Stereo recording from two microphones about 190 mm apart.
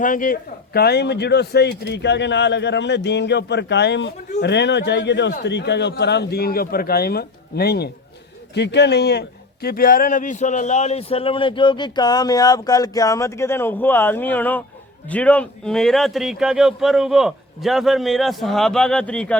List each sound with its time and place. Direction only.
0.0 s a man's voice: 45° left (ahead or behind); by 19.4 s 5° left (ahead or behind)